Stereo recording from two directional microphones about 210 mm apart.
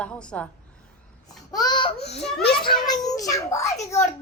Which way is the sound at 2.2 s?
Centre (ahead or behind).